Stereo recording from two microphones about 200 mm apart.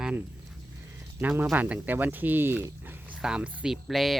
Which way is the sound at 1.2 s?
5° right (ahead or behind).